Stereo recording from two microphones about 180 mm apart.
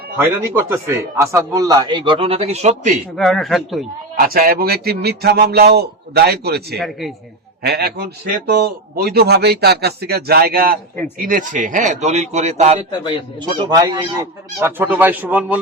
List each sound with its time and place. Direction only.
0.2 s a man's voice: 10° right (ahead or behind); by 3.0 s 40° right (ahead or behind)
3.2 s speech: centre (ahead or behind)
4.2 s a man's voice: 55° right (ahead or behind)
6.7 s speech: centre (ahead or behind)
7.6 s a man's voice: 60° right (ahead or behind); by 12.8 s 40° right (ahead or behind)
13.4 s speech: 25° right (ahead or behind); by 15.5 s 10° right (ahead or behind)